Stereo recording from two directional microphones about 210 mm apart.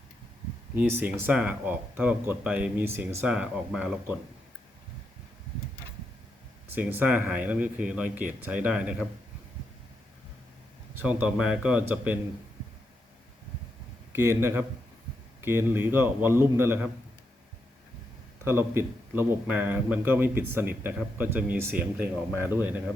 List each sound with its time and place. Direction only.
0.8 s speech: 10° right (ahead or behind)
6.7 s speech: 10° right (ahead or behind)
10.9 s speech: 5° right (ahead or behind)
14.1 s speech: 15° right (ahead or behind)
18.4 s speech: 10° right (ahead or behind)